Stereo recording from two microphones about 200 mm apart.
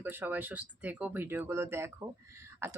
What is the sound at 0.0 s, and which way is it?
Speech, 10° right (ahead or behind).